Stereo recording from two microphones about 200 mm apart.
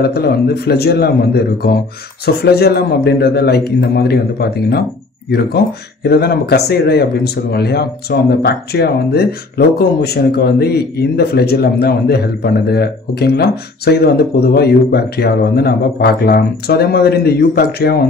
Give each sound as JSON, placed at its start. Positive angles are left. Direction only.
{"t": 0.0, "sound": "speech", "side_deg": 50}
{"t": 6.0, "sound": "speech", "side_deg": 50}